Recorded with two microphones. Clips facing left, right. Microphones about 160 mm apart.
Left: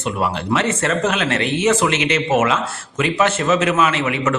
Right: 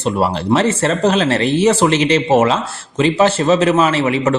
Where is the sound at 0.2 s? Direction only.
35° right (ahead or behind).